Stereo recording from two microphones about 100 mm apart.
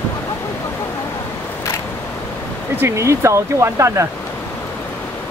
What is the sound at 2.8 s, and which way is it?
Speech, 30° right (ahead or behind).